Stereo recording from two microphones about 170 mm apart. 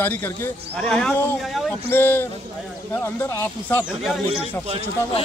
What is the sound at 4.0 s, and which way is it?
Speech, centre (ahead or behind).